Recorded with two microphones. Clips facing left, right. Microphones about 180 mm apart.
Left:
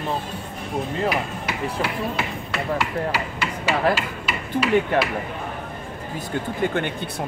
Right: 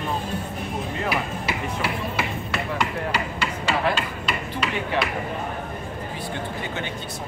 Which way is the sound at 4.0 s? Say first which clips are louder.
Even; 5° left (ahead or behind).